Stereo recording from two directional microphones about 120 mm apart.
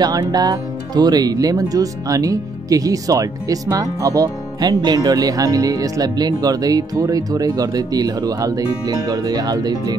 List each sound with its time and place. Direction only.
0.0 s speech: 35° right (ahead or behind)